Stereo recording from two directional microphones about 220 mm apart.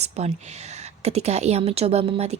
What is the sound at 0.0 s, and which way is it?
A woman's voice, 30° right (ahead or behind).